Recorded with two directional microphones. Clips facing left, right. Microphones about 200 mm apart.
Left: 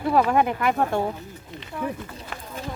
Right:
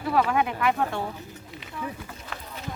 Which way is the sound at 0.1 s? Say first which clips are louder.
Left 3 dB; 40° left (ahead or behind).